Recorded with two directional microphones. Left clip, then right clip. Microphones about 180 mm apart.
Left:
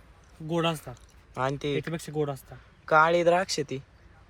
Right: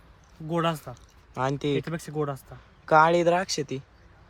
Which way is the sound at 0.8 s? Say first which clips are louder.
Right 2 dB; 15° right (ahead or behind).